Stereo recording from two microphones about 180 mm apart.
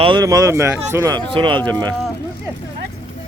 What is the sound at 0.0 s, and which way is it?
Speech, 25° right (ahead or behind).